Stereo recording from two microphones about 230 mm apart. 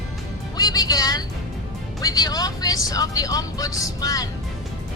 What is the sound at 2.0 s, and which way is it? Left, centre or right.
Speech, centre.